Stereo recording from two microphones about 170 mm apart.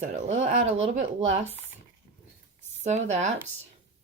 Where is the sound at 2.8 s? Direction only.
40° right (ahead or behind).